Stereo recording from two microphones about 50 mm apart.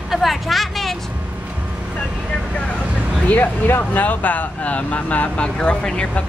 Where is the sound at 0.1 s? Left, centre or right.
Centre.